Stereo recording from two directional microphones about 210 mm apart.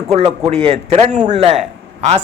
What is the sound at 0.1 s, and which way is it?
A man's voice, 25° right (ahead or behind).